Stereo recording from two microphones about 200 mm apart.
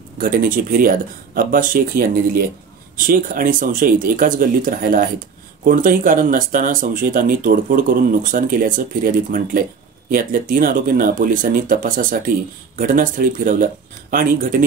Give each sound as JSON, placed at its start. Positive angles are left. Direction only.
{"t": 0.2, "sound": "speech", "side_deg": -45}